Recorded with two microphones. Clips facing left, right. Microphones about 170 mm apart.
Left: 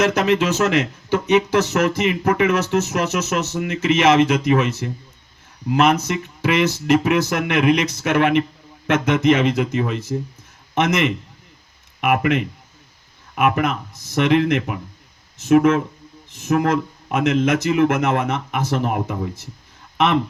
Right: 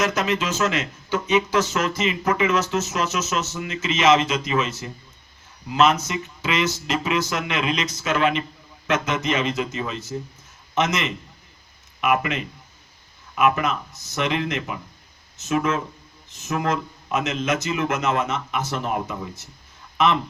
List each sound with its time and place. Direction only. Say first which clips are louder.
0.1 s speech: left 6 dB; 60° left (ahead or behind)